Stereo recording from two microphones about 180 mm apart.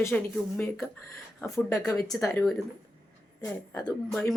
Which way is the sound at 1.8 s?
Centre (ahead or behind).